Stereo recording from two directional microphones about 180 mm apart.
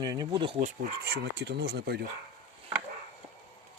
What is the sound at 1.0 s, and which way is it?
Speech, 65° right (ahead or behind).